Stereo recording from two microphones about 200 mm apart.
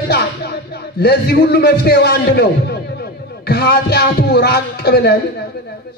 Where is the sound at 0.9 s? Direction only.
55° left (ahead or behind).